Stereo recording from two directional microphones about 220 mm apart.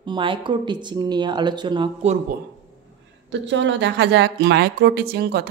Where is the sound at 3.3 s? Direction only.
55° right (ahead or behind).